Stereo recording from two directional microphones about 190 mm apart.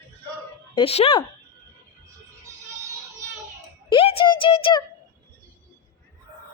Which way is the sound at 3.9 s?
30° left (ahead or behind).